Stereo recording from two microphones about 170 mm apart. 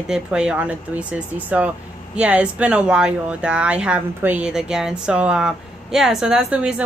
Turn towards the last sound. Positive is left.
turn(degrees=-5)  # may be behind; listen again after turning